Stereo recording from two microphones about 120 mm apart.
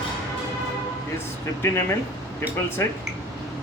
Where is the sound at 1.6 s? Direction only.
20° left (ahead or behind).